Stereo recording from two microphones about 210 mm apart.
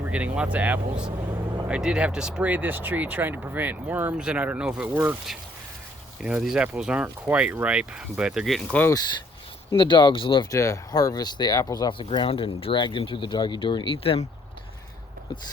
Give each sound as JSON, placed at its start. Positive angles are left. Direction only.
{"t": 0.0, "sound": "speech", "side_deg": -5}
{"t": 9.7, "sound": "speech", "side_deg": 20}